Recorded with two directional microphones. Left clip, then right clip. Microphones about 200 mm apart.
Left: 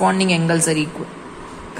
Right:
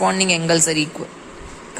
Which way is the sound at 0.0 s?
10° right (ahead or behind).